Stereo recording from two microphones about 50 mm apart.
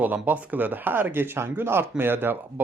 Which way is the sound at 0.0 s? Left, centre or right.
Right.